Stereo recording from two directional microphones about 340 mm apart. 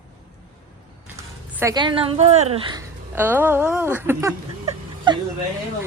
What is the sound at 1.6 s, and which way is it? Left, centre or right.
A woman's voice, centre.